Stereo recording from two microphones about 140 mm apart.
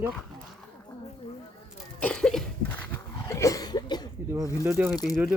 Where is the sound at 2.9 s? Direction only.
20° left (ahead or behind).